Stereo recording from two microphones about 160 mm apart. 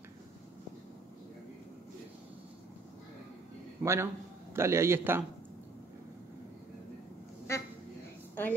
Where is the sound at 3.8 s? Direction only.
15° right (ahead or behind).